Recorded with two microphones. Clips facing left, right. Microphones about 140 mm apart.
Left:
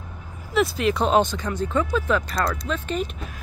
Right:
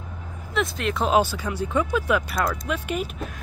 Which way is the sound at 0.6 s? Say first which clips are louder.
Left 4 dB; centre (ahead or behind).